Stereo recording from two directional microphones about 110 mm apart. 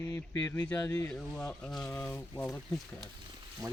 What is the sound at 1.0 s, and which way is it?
Speech, 15° left (ahead or behind).